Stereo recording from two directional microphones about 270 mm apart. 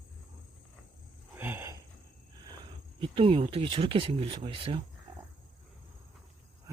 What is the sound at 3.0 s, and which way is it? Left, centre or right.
Speech, centre.